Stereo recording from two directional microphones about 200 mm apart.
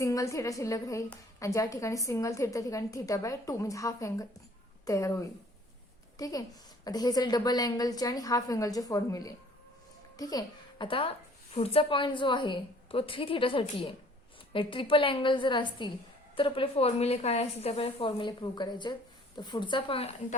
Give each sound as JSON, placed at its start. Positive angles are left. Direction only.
{"t": 0.0, "sound": "a woman's voice", "side_deg": 15}